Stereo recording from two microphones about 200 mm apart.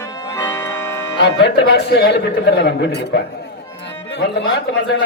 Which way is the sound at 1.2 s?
55° left (ahead or behind).